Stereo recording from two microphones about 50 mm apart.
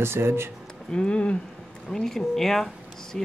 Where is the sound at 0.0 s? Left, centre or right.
Right.